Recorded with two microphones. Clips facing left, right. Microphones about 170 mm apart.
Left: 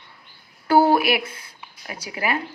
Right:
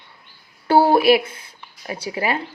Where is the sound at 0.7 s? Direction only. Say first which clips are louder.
Right 3 dB; 30° right (ahead or behind).